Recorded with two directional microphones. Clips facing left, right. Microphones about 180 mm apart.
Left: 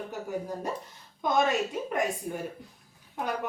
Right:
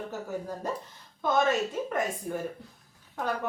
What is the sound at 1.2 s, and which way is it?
Speech, 15° left (ahead or behind).